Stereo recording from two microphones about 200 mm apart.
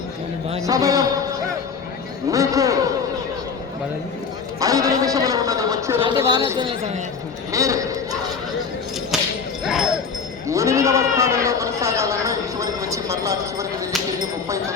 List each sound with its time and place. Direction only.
0.6 s a man's voice: 15° right (ahead or behind)
2.3 s a man's voice: 15° right (ahead or behind)
4.6 s a sound: 15° right (ahead or behind)
7.5 s speech: 15° right (ahead or behind)
9.1 s whip: centre (ahead or behind)
10.4 s bleat: 15° right (ahead or behind)